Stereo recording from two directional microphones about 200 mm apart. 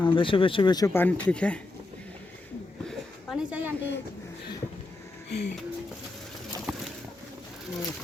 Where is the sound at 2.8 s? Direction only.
Centre (ahead or behind).